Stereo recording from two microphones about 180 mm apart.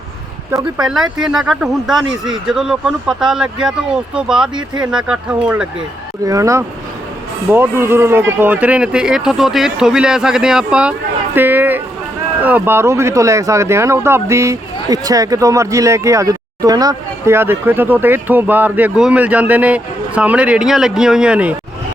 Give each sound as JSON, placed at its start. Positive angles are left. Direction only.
{"t": 0.8, "sound": "speech", "side_deg": 0}
{"t": 6.2, "sound": "speech", "side_deg": -20}